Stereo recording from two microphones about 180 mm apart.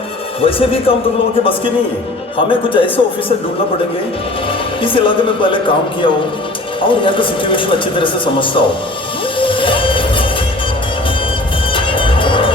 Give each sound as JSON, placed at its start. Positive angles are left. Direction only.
{"t": 0.4, "sound": "speech", "side_deg": 30}
{"t": 2.5, "sound": "a man's voice", "side_deg": 30}
{"t": 4.8, "sound": "a man's voice", "side_deg": 30}
{"t": 9.4, "sound": "music", "side_deg": 30}
{"t": 11.7, "sound": "music", "side_deg": 30}